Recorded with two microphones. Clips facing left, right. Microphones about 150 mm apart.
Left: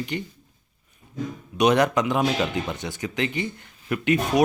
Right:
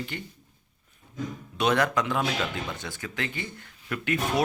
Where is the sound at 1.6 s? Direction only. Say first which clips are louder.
Left 5 dB; 20° left (ahead or behind).